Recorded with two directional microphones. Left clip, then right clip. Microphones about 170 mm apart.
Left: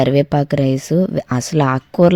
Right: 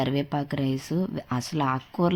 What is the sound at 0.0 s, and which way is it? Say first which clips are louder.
Speech: left 13 dB; 40° left (ahead or behind).